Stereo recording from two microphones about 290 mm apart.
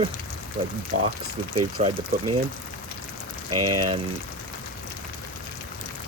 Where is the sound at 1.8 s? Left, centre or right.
Right.